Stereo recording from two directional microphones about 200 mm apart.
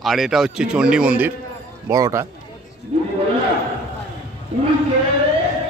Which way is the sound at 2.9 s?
30° right (ahead or behind).